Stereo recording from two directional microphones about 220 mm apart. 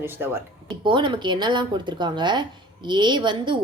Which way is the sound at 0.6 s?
20° right (ahead or behind).